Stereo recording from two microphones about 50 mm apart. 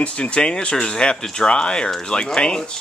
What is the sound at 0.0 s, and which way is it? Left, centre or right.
Speech, left.